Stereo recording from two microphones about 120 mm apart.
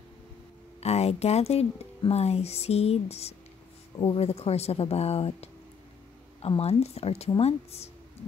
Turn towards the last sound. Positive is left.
turn(degrees=60)  # may be behind; listen again after turning